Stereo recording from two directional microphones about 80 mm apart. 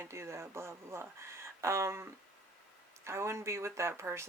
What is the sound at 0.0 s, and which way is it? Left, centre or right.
Speech, right.